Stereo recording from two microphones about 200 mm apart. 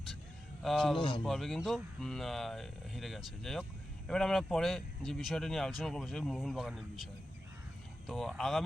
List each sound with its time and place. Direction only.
0.6 s speech: centre (ahead or behind)
0.9 s a man's voice: 25° left (ahead or behind)
1.2 s speech: centre (ahead or behind)